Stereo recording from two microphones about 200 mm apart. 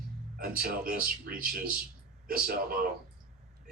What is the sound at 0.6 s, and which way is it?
A man's voice, 45° right (ahead or behind).